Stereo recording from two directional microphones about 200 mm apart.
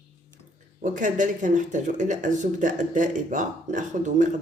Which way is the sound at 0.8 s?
40° right (ahead or behind).